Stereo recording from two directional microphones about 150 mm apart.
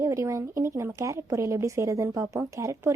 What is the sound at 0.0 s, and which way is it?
Speech, 20° right (ahead or behind).